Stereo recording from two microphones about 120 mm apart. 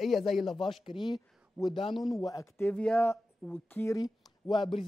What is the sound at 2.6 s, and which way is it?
Speech, 10° left (ahead or behind).